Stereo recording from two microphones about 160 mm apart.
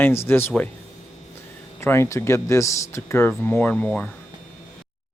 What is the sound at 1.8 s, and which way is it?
Speech, 15° left (ahead or behind).